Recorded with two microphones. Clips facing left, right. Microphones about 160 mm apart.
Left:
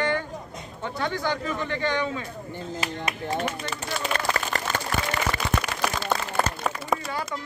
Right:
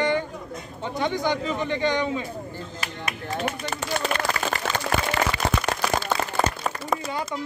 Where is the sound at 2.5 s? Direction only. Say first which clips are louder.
Left 3 dB; 25° left (ahead or behind).